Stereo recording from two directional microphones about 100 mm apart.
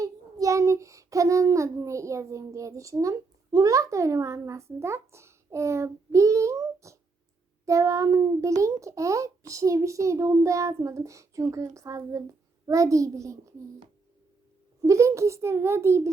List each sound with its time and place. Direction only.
0.0 s child singing: 35° right (ahead or behind)
7.6 s a child's voice: 30° right (ahead or behind)
14.8 s a child's voice: 30° right (ahead or behind)